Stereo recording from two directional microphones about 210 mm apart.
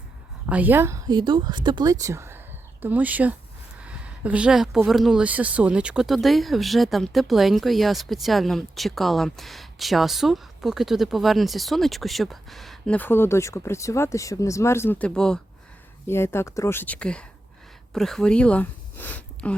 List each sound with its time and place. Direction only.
0.4 s speech: 5° right (ahead or behind)